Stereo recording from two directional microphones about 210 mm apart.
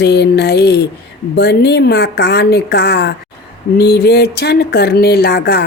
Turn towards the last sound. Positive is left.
turn(degrees=50)  # may be behind; listen again after turning